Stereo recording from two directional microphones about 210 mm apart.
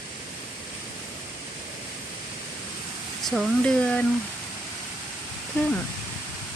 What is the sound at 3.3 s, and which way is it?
Speech, centre (ahead or behind).